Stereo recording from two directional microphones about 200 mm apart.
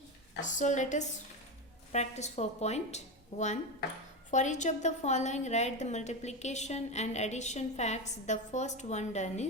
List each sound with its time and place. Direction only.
0.4 s a woman's voice: 35° left (ahead or behind)